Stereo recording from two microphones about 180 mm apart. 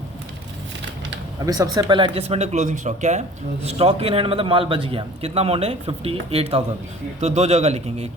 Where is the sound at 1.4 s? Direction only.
20° right (ahead or behind).